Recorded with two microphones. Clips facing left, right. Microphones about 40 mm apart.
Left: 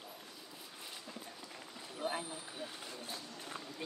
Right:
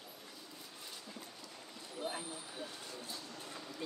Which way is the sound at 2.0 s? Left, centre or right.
Centre.